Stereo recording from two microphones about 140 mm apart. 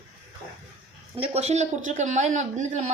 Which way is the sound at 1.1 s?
45° right (ahead or behind).